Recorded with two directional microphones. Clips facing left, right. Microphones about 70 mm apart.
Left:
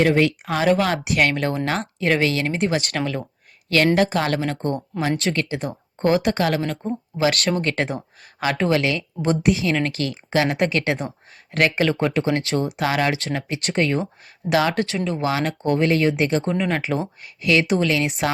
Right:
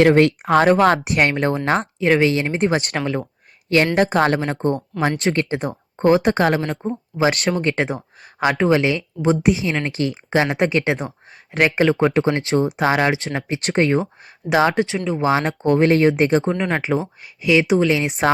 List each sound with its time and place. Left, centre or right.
0.0 s speech: right
0.4 s speech: right
1.8 s speech: centre; by 6.6 s right
6.6 s speech: centre
7.2 s speech: right
14.9 s speech: centre
15.2 s speech: right
16.4 s speech: centre